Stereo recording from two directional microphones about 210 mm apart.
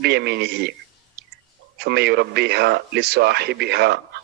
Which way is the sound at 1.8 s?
50° right (ahead or behind).